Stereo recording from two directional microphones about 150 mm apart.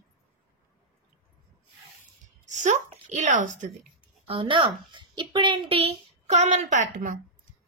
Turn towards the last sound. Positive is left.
turn(degrees=-60)  # may be behind; listen again after turning